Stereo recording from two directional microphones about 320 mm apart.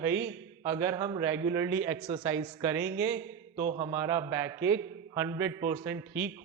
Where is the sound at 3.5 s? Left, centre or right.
Right.